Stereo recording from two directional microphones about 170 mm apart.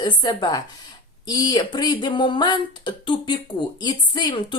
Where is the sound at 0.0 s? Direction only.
25° left (ahead or behind).